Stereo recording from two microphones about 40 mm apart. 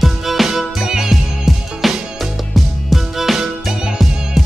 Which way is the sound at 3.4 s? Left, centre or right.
Centre.